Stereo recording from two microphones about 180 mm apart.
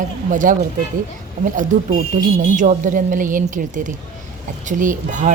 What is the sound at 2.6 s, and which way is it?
Speech, 45° right (ahead or behind).